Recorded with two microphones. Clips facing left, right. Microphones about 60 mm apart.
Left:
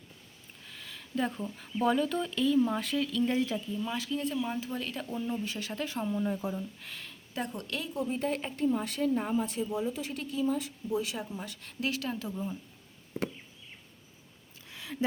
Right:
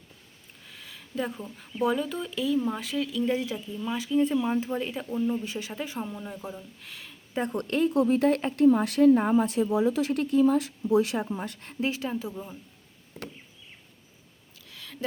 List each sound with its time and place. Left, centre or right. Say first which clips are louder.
0.7 s speech: left 1 dB; centre; by 4.9 s right
4.9 s speech: right 5 dB; centre
6.1 s speech: left 5 dB; centre
7.7 s speech: right 12 dB; right
7.9 s speech: right 7 dB; right
9.3 s speech: right 7 dB; right
10.1 s speech: right 9 dB; right
12.0 s speech: right 2 dB; centre
14.7 s a sound: left 3 dB; centre